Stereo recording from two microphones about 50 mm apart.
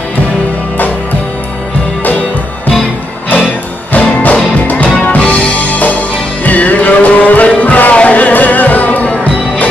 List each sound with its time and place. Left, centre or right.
3.9 s music: left
5.2 s music: left
5.7 s music: left